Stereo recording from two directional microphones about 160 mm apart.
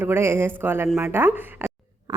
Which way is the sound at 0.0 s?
15° right (ahead or behind).